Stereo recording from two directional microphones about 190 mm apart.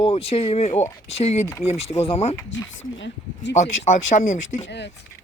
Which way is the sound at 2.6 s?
75° left (ahead or behind).